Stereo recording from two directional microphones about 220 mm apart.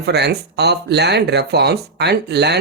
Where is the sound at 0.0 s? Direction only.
50° right (ahead or behind).